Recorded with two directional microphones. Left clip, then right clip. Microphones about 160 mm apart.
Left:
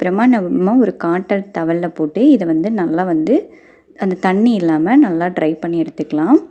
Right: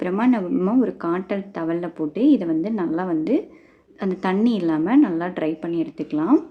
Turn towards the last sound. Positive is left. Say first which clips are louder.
# left 7 dB
turn(degrees=35)  # may be behind; listen again after turning